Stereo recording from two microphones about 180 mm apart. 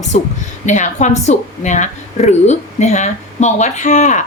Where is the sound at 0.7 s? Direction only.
40° left (ahead or behind).